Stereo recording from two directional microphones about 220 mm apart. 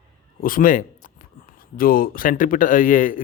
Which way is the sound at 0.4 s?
40° left (ahead or behind).